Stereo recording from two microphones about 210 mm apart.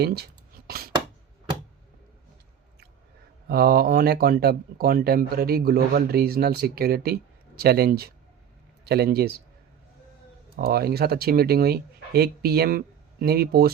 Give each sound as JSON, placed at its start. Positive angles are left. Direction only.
{"t": 0.0, "sound": "speech", "side_deg": -50}
{"t": 3.5, "sound": "a man's voice", "side_deg": -45}
{"t": 10.6, "sound": "speech", "side_deg": -45}